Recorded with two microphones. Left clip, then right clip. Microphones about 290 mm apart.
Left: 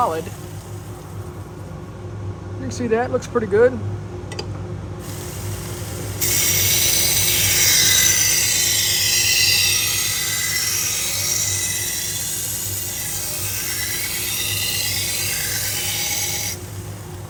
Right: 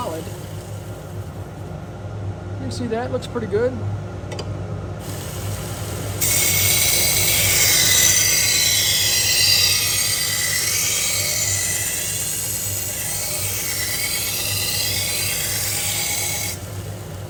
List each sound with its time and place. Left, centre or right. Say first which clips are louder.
2.6 s speech: left 5 dB; centre
3.3 s speech: left 7 dB; left
6.1 s ratchet: even; centre
13.7 s a sound: right 1 dB; centre